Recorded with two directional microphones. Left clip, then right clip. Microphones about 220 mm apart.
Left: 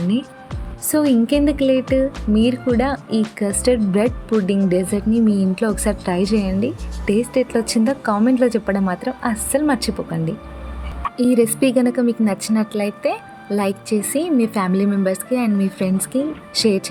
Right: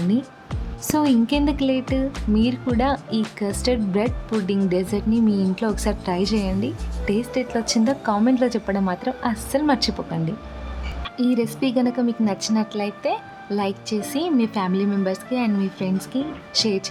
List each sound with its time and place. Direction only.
0.0 s music: centre (ahead or behind)
0.9 s a woman's voice: 5° left (ahead or behind)